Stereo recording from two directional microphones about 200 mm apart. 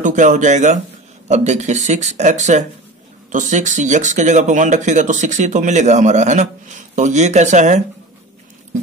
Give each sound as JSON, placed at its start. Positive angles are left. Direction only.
{"t": 0.0, "sound": "speech", "side_deg": -40}